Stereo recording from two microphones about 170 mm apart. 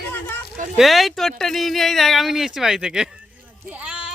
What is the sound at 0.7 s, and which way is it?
Speech, centre (ahead or behind).